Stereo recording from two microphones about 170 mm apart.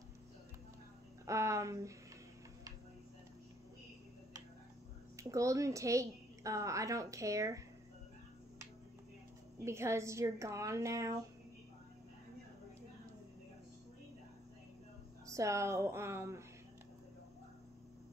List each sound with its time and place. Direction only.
1.2 s speech: 15° right (ahead or behind)
5.1 s a woman's voice: 20° right (ahead or behind)
9.7 s a woman's voice: 15° right (ahead or behind)
15.3 s a woman's voice: 15° right (ahead or behind)